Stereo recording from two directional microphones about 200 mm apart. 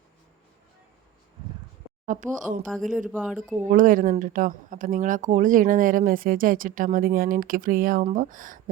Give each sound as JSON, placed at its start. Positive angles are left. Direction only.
{"t": 2.0, "sound": "speech", "side_deg": -40}
{"t": 3.2, "sound": "speech", "side_deg": 0}
{"t": 3.7, "sound": "speech", "side_deg": -40}